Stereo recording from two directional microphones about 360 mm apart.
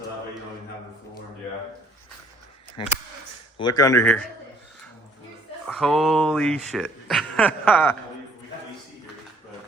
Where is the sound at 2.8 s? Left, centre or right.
Centre.